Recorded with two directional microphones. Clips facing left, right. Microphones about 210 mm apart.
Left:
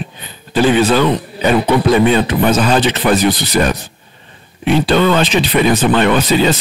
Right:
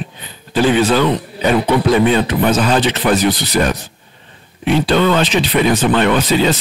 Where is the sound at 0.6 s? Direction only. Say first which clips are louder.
Left 1 dB; 15° left (ahead or behind).